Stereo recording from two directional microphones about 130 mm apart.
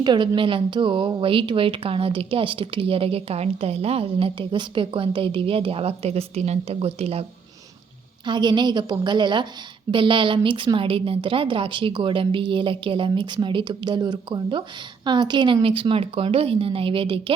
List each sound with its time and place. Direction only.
0.0 s a woman's voice: 35° right (ahead or behind)
8.2 s a woman's voice: 35° right (ahead or behind)